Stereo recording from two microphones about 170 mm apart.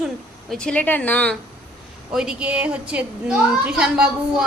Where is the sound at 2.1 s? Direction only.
5° right (ahead or behind).